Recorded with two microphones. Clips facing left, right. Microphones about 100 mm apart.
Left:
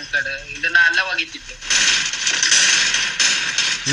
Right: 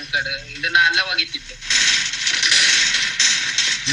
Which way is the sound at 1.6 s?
55° left (ahead or behind).